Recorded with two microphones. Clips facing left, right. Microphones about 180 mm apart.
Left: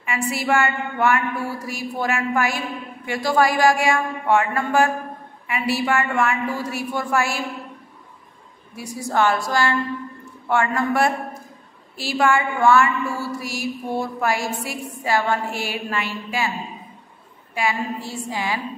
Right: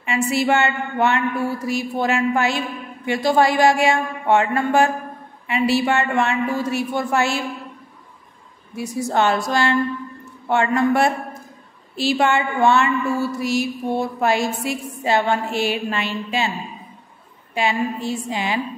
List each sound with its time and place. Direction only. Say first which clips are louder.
0.0 s a woman's voice: right 5 dB; 25° right (ahead or behind)
8.7 s a woman's voice: right 2 dB; 20° right (ahead or behind)
17.6 s a woman's voice: right 3 dB; 25° right (ahead or behind)